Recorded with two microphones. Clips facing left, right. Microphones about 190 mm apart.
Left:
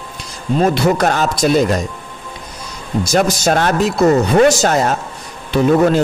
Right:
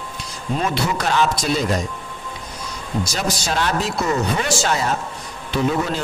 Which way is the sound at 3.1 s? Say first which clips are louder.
Left 10 dB; 50° left (ahead or behind).